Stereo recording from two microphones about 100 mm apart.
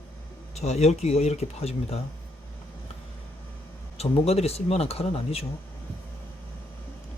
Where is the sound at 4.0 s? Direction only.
90° left.